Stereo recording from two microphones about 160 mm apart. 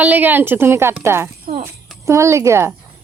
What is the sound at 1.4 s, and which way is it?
Speech, 60° right (ahead or behind).